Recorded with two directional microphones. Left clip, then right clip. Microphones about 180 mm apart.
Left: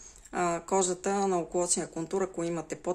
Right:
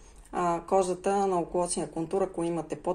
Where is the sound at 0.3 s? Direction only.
35° left (ahead or behind).